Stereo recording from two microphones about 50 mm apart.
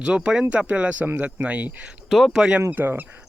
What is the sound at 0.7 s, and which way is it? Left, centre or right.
Speech, right.